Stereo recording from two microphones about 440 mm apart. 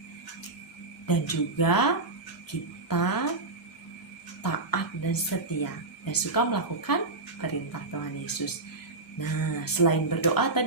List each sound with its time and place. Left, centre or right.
1.0 s a woman's voice: left
4.4 s a woman's voice: left